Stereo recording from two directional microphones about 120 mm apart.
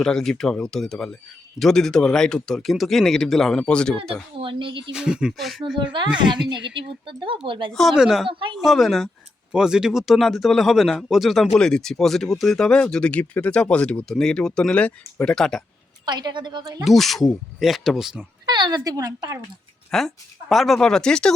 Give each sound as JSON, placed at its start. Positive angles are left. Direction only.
{"t": 0.0, "sound": "speech", "side_deg": 5}
{"t": 4.1, "sound": "speech", "side_deg": -45}
{"t": 4.9, "sound": "speech", "side_deg": -5}
{"t": 5.8, "sound": "speech", "side_deg": -40}
{"t": 7.7, "sound": "speech", "side_deg": 0}
{"t": 8.3, "sound": "speech", "side_deg": -45}
{"t": 8.5, "sound": "speech", "side_deg": 0}
{"t": 16.0, "sound": "speech", "side_deg": -35}
{"t": 16.8, "sound": "speech", "side_deg": 0}
{"t": 18.4, "sound": "speech", "side_deg": -35}
{"t": 19.9, "sound": "speech", "side_deg": 0}